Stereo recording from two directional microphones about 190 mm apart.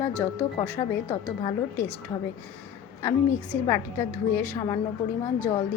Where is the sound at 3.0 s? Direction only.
10° left (ahead or behind).